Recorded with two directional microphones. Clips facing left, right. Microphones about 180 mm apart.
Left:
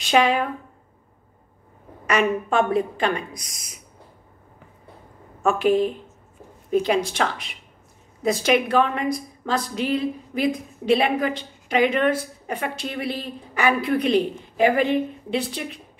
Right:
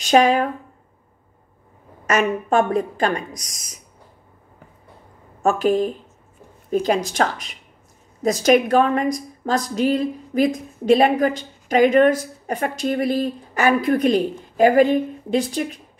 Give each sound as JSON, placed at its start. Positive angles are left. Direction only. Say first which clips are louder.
{"t": 0.0, "sound": "a woman's voice", "louder": "right 4 dB", "side_deg": -45}
{"t": 2.0, "sound": "a woman's voice", "louder": "right 2 dB", "side_deg": -45}
{"t": 5.4, "sound": "a woman's voice", "louder": "right 1 dB", "side_deg": -40}